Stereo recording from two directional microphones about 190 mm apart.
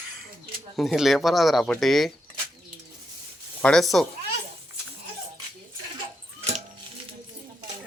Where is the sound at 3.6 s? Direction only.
5° left (ahead or behind).